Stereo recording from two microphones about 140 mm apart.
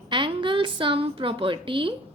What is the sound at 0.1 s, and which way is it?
A woman's voice, 35° right (ahead or behind).